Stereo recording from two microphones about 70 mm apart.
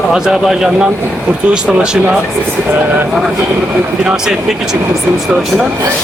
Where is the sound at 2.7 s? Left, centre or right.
Right.